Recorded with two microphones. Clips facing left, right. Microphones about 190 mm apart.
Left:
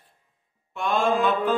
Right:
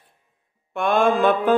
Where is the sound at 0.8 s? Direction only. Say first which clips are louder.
Right 4 dB; 60° right (ahead or behind).